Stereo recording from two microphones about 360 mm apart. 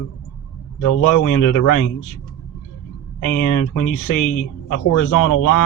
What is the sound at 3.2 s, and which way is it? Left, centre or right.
Speech, left.